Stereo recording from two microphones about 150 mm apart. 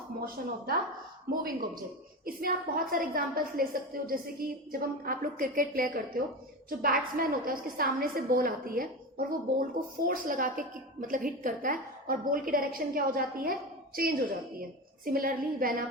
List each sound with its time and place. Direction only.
0.2 s speech: 90° right
1.3 s a woman's voice: 70° right (ahead or behind)
15.0 s a woman's voice: 75° right (ahead or behind)